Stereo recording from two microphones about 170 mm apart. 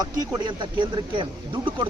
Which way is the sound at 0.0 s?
25° right (ahead or behind).